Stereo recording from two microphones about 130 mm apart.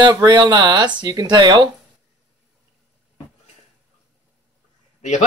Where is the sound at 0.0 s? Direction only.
35° right (ahead or behind).